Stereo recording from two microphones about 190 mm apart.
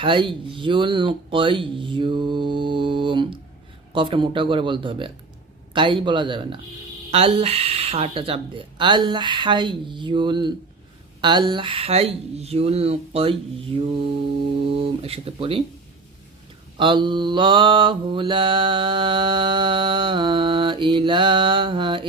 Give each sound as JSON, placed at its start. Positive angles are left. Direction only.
{"t": 0.0, "sound": "mantra", "side_deg": -25}
{"t": 11.2, "sound": "speech", "side_deg": -25}
{"t": 14.7, "sound": "mantra", "side_deg": -30}
{"t": 16.7, "sound": "mantra", "side_deg": -25}